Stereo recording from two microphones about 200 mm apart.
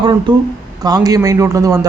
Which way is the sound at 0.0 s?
25° right (ahead or behind).